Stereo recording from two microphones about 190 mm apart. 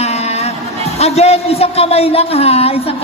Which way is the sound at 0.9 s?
35° left (ahead or behind).